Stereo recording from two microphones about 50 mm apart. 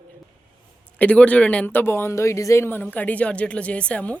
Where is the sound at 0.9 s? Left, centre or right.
Left.